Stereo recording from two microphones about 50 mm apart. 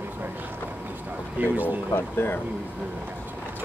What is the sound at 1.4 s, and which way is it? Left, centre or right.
Speech, right.